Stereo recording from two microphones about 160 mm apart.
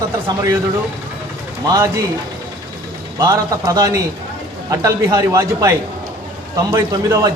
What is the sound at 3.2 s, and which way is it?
A man's voice, 20° right (ahead or behind).